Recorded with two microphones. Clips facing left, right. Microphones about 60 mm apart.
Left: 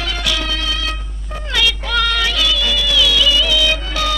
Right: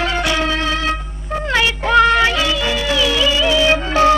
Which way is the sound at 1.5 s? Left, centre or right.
Right.